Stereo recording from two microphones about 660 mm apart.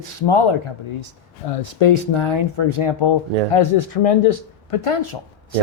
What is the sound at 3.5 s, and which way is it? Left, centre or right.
Speech, left.